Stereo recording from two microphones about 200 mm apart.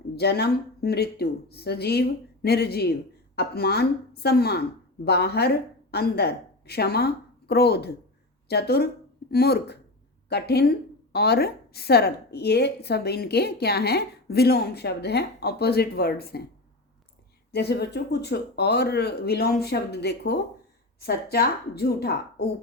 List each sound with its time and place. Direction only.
0.2 s a woman's voice: 55° left (ahead or behind)
17.5 s a woman's voice: 55° left (ahead or behind)